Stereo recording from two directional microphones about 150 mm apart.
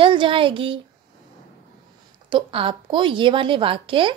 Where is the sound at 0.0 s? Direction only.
35° right (ahead or behind).